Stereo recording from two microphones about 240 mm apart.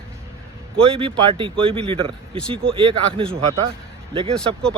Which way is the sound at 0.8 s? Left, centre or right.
Right.